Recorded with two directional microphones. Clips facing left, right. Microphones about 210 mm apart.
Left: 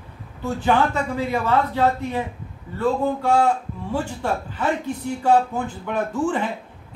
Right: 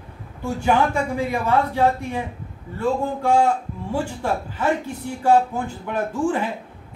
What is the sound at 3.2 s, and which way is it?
A man's voice, 10° right (ahead or behind).